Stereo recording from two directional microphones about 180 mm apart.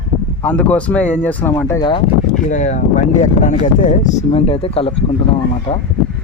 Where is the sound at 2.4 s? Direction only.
45° left (ahead or behind).